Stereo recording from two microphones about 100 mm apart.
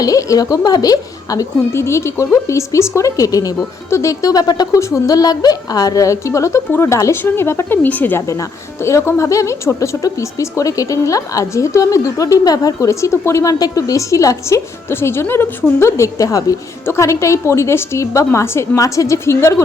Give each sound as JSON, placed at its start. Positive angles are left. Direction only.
{"t": 0.0, "sound": "a woman's voice", "side_deg": 35}
{"t": 8.3, "sound": "a woman's voice", "side_deg": 30}